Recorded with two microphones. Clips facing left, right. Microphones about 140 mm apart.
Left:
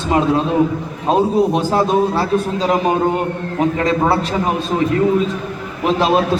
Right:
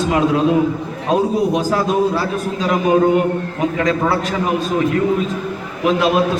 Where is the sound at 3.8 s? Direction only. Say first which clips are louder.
Right 1 dB; 35° left (ahead or behind).